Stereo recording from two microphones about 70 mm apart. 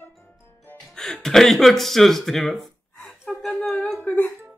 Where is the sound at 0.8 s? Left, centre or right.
Centre.